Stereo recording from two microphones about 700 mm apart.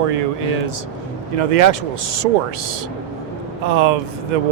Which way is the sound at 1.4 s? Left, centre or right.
Right.